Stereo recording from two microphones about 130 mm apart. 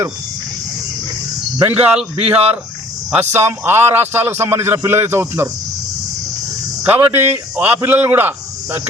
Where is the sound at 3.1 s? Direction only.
15° right (ahead or behind).